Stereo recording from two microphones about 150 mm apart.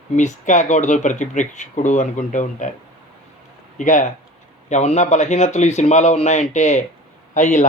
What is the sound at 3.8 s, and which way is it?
Speech, 55° left (ahead or behind).